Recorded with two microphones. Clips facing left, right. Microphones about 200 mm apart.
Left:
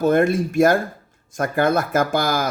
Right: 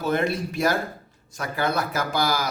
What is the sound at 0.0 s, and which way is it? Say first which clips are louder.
Speech: left 7 dB; 50° left (ahead or behind).